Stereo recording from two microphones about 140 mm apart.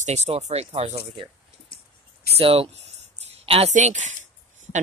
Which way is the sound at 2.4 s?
45° right (ahead or behind).